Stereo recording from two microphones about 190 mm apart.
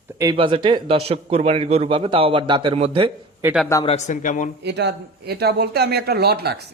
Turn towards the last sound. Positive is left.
turn(degrees=-55)  # may be behind; listen again after turning